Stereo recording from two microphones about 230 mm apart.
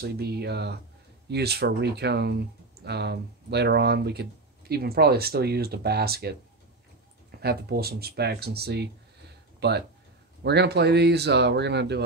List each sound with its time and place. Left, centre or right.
0.0 s speech: right